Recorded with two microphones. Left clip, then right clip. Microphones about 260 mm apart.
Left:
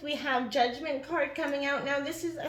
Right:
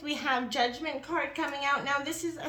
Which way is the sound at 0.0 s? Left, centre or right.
Right.